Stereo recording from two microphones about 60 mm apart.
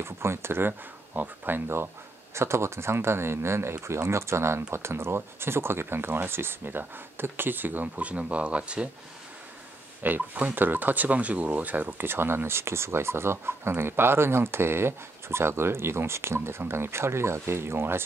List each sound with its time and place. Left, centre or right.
0.0 s speech: right
2.3 s speech: right; by 8.8 s centre
10.0 s speech: right